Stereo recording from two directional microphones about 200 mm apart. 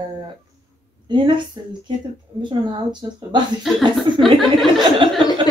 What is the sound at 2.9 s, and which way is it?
Speech, 20° right (ahead or behind).